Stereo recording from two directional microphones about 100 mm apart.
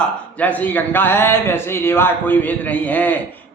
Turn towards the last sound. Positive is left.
turn(degrees=15)  # may be behind; listen again after turning